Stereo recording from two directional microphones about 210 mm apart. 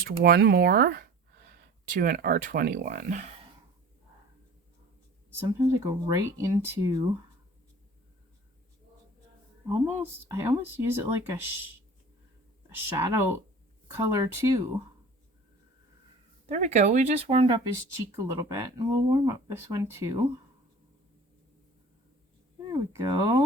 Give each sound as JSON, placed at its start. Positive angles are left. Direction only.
{"t": 0.0, "sound": "speech", "side_deg": -45}
{"t": 5.3, "sound": "speech", "side_deg": -15}
{"t": 9.8, "sound": "speech", "side_deg": -10}
{"t": 12.7, "sound": "speech", "side_deg": -10}
{"t": 16.5, "sound": "speech", "side_deg": -35}
{"t": 18.2, "sound": "speech", "side_deg": -15}
{"t": 22.7, "sound": "speech", "side_deg": -15}